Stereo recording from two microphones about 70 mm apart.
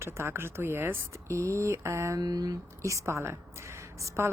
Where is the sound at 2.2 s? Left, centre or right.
Right.